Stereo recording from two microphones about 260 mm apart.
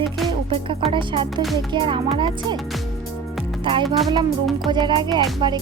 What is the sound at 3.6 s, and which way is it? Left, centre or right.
Speech, centre.